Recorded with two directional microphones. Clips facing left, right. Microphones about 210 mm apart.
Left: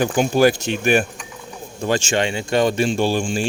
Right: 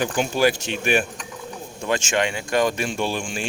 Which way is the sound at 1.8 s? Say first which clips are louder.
Left 3 dB; 30° left (ahead or behind).